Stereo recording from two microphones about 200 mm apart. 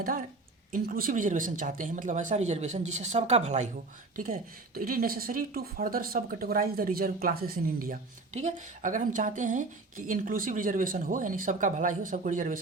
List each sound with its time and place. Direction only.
0.7 s speech: 45° right (ahead or behind)
4.2 s speech: 45° right (ahead or behind)